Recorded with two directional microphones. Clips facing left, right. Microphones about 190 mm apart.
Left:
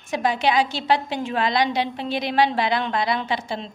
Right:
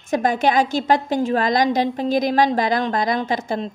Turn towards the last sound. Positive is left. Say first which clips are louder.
# right 4 dB
turn(degrees=-45)  # may be behind; listen again after turning